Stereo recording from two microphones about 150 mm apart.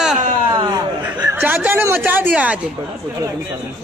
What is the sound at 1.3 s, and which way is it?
Speech, 15° right (ahead or behind).